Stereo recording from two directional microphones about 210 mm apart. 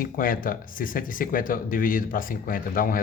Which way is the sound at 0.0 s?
40° left (ahead or behind).